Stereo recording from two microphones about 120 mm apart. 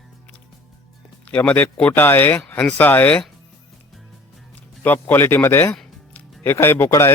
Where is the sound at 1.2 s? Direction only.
10° left (ahead or behind).